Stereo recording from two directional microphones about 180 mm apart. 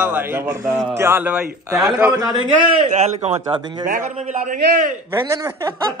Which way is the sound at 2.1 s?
20° right (ahead or behind).